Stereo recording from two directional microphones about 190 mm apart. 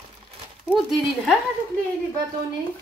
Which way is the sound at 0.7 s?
Centre (ahead or behind).